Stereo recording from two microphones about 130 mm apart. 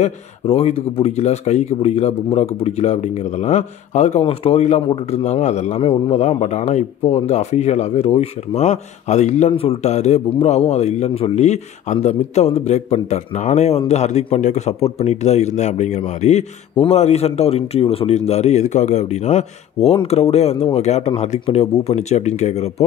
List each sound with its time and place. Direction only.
0.0 s a man's voice: 55° left (ahead or behind)
9.5 s a man's voice: 50° left (ahead or behind)